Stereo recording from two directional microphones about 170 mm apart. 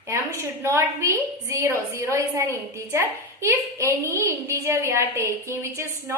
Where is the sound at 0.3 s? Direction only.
15° right (ahead or behind).